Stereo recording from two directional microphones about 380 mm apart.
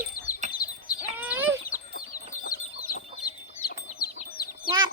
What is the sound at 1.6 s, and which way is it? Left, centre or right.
Chicken, left.